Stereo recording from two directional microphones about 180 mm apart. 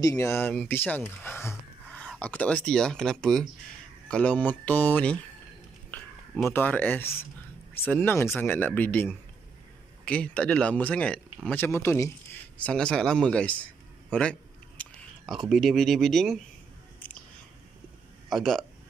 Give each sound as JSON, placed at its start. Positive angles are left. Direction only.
{"t": 0.0, "sound": "speech", "side_deg": 15}
{"t": 6.5, "sound": "speech", "side_deg": 10}
{"t": 14.8, "sound": "speech", "side_deg": 5}
{"t": 18.3, "sound": "speech", "side_deg": 0}